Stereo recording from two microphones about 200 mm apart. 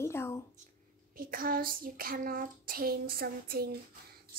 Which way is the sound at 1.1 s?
45° right (ahead or behind).